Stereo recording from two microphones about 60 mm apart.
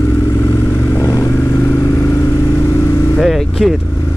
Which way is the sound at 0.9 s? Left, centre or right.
Left.